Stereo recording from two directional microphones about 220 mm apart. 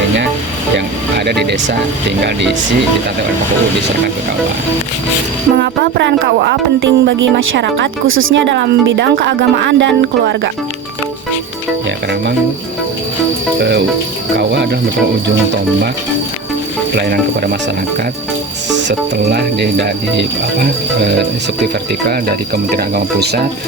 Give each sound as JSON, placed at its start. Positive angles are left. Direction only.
{"t": 1.2, "sound": "speech", "side_deg": -50}
{"t": 5.5, "sound": "speech", "side_deg": -45}
{"t": 14.3, "sound": "speech", "side_deg": -55}
{"t": 18.8, "sound": "speech", "side_deg": -50}